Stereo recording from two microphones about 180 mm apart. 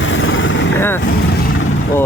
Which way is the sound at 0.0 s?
90° left.